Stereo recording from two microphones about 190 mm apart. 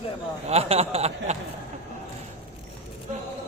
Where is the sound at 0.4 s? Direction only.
30° right (ahead or behind).